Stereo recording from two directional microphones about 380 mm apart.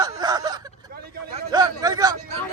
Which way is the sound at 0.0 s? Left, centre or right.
Centre.